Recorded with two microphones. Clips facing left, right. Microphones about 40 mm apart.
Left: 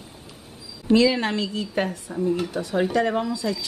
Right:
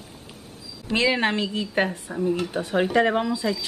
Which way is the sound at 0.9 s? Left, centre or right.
Right.